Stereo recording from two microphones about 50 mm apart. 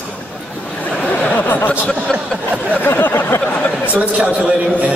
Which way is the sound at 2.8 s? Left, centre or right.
Left.